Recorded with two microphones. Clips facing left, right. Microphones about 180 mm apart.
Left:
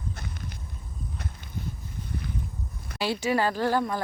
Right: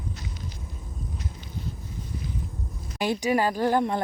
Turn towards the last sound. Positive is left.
turn(degrees=-20)  # may be behind; listen again after turning